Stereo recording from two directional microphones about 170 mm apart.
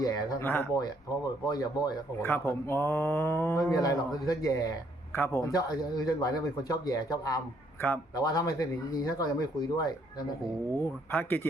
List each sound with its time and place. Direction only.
0.0 s a man's voice: 20° left (ahead or behind)
1.5 s a man's voice: 25° left (ahead or behind)
11.1 s a man's voice: 10° left (ahead or behind)